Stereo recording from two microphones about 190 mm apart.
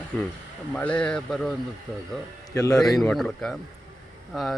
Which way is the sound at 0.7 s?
5° left (ahead or behind).